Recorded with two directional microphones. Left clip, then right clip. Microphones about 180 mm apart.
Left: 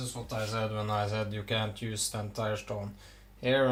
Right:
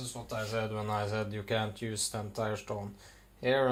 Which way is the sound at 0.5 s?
30° right (ahead or behind).